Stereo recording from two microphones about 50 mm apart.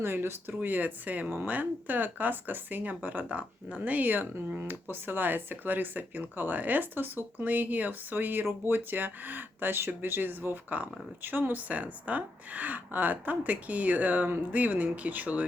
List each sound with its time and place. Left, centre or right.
0.0 s speech: right